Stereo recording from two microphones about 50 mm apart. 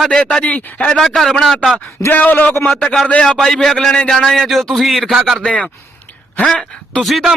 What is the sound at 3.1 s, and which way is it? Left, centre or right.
Speech, left.